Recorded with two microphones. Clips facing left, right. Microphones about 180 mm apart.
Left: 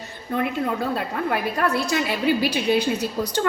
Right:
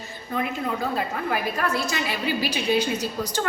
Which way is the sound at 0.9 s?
65° left (ahead or behind).